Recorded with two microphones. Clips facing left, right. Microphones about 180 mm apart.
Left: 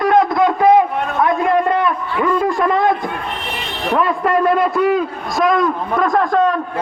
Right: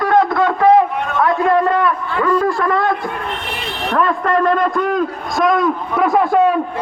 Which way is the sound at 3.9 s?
10° left (ahead or behind).